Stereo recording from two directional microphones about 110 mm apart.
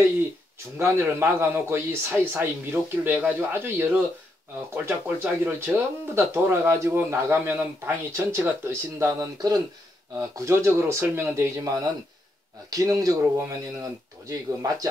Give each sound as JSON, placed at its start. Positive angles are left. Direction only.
{"t": 0.7, "sound": "speech", "side_deg": -20}